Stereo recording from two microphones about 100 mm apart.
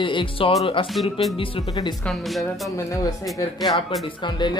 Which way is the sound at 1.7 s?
45° left (ahead or behind).